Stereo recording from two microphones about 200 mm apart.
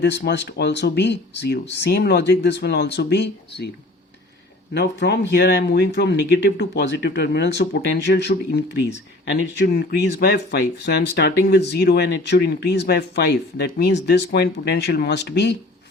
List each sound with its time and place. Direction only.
0.0 s speech: 60° left (ahead or behind)
4.7 s speech: 55° left (ahead or behind)